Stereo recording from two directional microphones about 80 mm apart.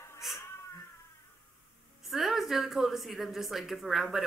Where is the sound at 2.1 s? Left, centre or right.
Centre.